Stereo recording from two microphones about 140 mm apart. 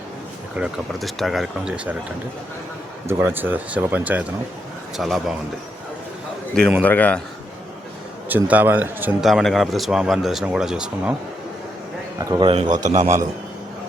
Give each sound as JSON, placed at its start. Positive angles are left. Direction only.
{"t": 0.5, "sound": "speech", "side_deg": -5}
{"t": 3.1, "sound": "speech", "side_deg": -15}
{"t": 6.5, "sound": "a man's voice", "side_deg": 5}
{"t": 8.3, "sound": "speech", "side_deg": -10}
{"t": 9.2, "sound": "speech", "side_deg": 0}
{"t": 12.2, "sound": "a man's voice", "side_deg": -30}
{"t": 12.7, "sound": "a man's voice", "side_deg": -60}